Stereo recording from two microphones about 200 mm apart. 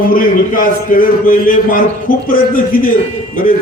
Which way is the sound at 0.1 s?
45° left (ahead or behind).